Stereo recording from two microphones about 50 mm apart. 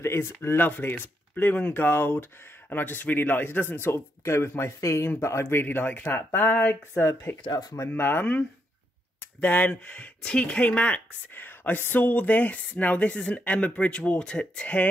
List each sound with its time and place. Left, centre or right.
0.0 s speech: left
3.9 s speech: left
5.4 s speech: left
7.9 s speech: left
9.4 s speech: left
11.4 s speech: left